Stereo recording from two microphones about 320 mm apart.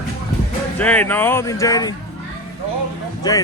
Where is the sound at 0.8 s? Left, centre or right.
Centre.